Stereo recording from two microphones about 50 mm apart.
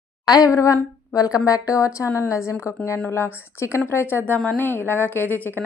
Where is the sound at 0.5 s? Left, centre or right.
Left.